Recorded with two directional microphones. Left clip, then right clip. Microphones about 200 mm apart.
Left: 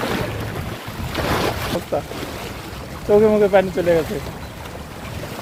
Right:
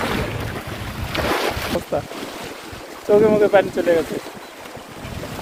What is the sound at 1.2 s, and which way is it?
Boat, 35° right (ahead or behind).